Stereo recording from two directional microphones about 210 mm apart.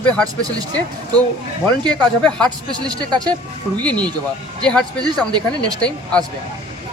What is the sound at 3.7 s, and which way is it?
Speech, 5° left (ahead or behind).